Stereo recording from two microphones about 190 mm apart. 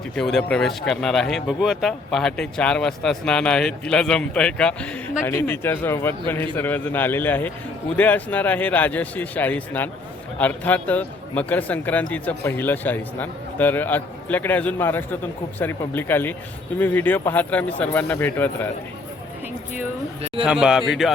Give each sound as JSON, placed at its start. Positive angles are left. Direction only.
{"t": 0.2, "sound": "speech", "side_deg": 5}
{"t": 20.4, "sound": "speech", "side_deg": -5}